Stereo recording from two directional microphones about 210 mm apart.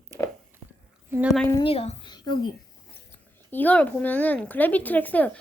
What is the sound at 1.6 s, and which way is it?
Speech, 30° left (ahead or behind).